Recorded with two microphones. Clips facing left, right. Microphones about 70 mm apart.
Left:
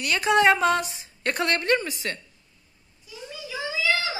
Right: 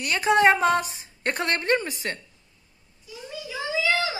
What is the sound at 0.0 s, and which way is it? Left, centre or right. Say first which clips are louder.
A woman's voice: right 1 dB; right.